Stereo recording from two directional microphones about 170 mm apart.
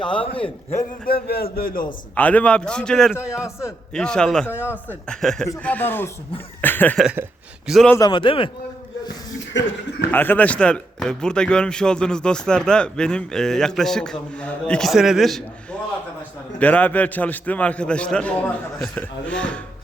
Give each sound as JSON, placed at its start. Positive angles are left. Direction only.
{"t": 0.0, "sound": "a man's voice", "side_deg": 30}
{"t": 1.0, "sound": "a man's voice", "side_deg": 65}
{"t": 2.1, "sound": "a man's voice", "side_deg": 10}
{"t": 3.2, "sound": "a man's voice", "side_deg": 15}
{"t": 3.9, "sound": "a man's voice", "side_deg": 5}
{"t": 6.6, "sound": "chuckle", "side_deg": 10}
{"t": 7.0, "sound": "a man's voice", "side_deg": -5}
{"t": 7.9, "sound": "a man's voice", "side_deg": 25}
{"t": 10.1, "sound": "a man's voice", "side_deg": 10}